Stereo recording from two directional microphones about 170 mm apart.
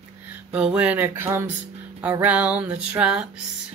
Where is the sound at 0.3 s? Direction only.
5° right (ahead or behind).